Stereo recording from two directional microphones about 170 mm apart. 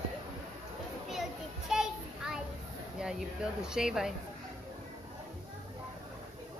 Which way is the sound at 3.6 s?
5° right (ahead or behind).